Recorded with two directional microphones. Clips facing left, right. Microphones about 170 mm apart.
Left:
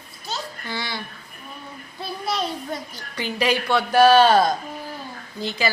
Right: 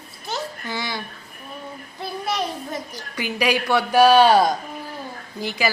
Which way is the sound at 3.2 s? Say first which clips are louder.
Right 1 dB; 10° right (ahead or behind).